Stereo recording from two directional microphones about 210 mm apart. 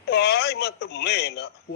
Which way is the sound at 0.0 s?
50° left (ahead or behind).